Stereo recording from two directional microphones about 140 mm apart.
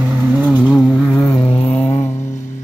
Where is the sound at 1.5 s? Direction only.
45° left (ahead or behind).